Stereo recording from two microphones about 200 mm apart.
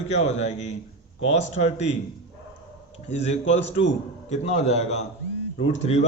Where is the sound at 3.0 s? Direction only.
35° left (ahead or behind).